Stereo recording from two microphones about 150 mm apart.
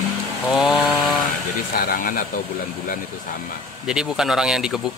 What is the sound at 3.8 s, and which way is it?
Speech, 5° right (ahead or behind).